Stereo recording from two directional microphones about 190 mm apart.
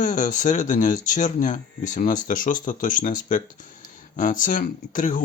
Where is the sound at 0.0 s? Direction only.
40° left (ahead or behind).